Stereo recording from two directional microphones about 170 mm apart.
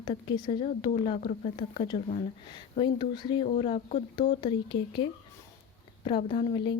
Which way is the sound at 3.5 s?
35° left (ahead or behind).